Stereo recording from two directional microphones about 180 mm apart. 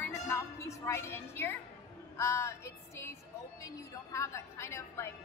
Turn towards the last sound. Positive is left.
turn(degrees=15)  # may be behind; listen again after turning